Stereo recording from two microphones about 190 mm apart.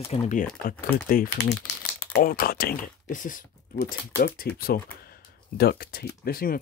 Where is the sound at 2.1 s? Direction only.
50° left (ahead or behind).